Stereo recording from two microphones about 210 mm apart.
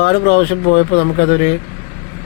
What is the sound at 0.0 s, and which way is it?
A man's voice, 50° left (ahead or behind).